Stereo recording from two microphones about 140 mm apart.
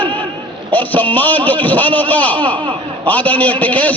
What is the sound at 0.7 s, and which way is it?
A man's voice, 10° left (ahead or behind).